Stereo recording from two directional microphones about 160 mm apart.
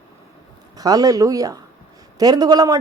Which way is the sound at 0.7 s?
25° right (ahead or behind).